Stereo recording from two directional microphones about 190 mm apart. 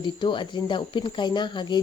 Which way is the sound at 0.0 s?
25° left (ahead or behind).